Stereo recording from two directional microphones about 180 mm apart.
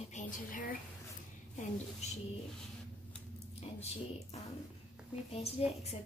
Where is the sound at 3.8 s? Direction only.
35° left (ahead or behind).